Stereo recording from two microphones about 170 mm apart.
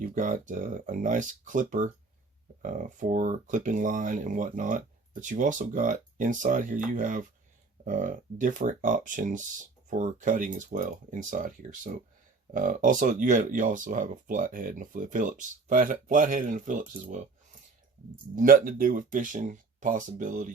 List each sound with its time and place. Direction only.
0.0 s speech: 50° right (ahead or behind)
18.3 s speech: 55° right (ahead or behind)